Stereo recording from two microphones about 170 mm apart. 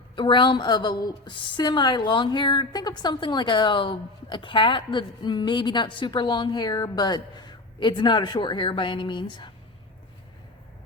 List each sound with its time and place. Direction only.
0.2 s a woman's voice: 30° left (ahead or behind)